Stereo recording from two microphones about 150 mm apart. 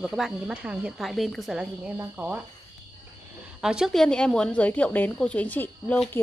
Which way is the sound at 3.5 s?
5° right (ahead or behind).